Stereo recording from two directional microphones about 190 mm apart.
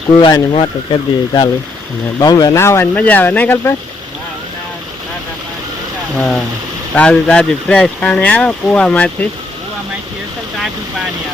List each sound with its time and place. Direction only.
0.2 s speech: 20° left (ahead or behind)
6.1 s speech: 5° left (ahead or behind)